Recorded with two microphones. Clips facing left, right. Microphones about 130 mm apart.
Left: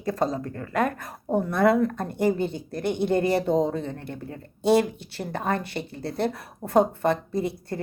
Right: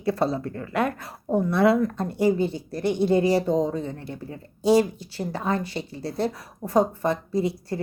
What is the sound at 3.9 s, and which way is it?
Speech, 50° left (ahead or behind).